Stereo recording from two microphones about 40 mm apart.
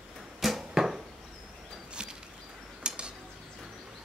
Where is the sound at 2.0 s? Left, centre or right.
Right.